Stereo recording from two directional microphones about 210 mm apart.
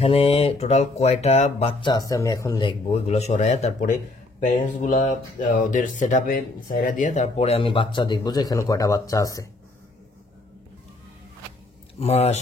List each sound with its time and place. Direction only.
0.0 s speech: 30° left (ahead or behind)
3.1 s speech: 30° left (ahead or behind); by 9.5 s 15° left (ahead or behind)
12.0 s speech: 30° left (ahead or behind)